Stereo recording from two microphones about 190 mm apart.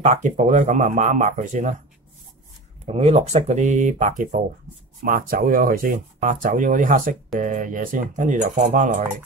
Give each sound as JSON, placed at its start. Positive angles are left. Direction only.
{"t": 0.0, "sound": "speech", "side_deg": -40}
{"t": 2.9, "sound": "speech", "side_deg": -35}